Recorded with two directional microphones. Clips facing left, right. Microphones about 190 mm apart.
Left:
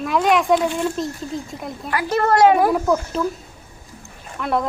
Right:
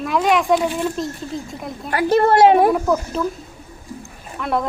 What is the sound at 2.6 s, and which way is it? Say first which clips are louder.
Speech: right 1 dB; centre (ahead or behind).